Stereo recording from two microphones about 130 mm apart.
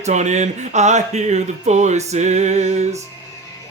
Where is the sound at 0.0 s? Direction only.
65° right (ahead or behind).